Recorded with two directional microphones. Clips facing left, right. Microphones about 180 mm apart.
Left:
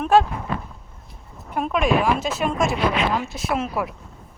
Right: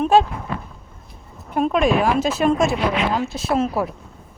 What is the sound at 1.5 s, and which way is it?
Speech, 30° right (ahead or behind).